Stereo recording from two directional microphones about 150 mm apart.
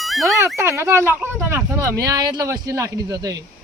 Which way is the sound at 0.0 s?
Centre (ahead or behind).